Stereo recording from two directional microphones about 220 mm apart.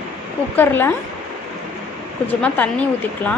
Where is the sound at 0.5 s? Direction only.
10° left (ahead or behind).